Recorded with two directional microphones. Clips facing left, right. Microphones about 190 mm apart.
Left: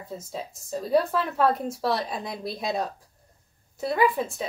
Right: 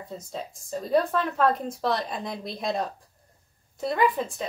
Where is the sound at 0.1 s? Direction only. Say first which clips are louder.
Left 2 dB; 5° left (ahead or behind).